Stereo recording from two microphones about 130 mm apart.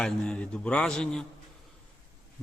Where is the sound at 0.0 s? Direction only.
5° left (ahead or behind).